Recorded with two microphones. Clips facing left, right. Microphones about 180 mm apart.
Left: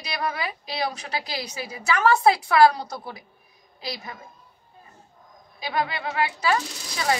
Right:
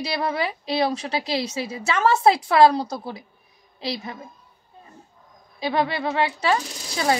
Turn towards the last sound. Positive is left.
turn(degrees=-30)  # may be behind; listen again after turning